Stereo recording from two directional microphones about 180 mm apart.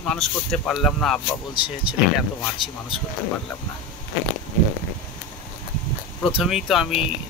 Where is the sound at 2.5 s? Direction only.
30° left (ahead or behind).